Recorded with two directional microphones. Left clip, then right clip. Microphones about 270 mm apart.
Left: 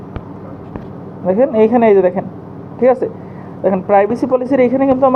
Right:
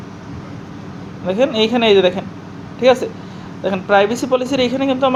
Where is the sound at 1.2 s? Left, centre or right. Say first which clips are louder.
Left 4 dB; centre.